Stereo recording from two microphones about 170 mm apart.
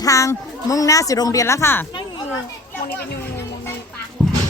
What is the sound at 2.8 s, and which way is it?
Children playing, 75° left (ahead or behind).